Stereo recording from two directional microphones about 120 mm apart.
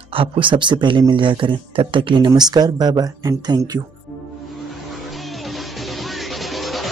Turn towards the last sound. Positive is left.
turn(degrees=0)  # may be behind; listen again after turning